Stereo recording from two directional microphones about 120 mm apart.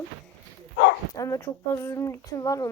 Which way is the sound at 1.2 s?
30° left (ahead or behind).